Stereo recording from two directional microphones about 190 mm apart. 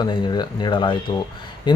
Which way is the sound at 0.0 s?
25° left (ahead or behind).